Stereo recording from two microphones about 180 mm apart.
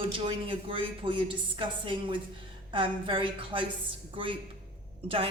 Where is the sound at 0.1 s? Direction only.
30° right (ahead or behind).